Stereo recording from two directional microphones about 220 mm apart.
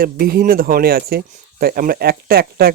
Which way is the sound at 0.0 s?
45° right (ahead or behind).